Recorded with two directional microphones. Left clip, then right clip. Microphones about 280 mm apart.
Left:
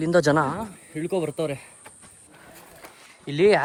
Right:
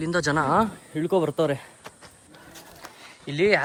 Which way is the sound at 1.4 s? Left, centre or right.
Right.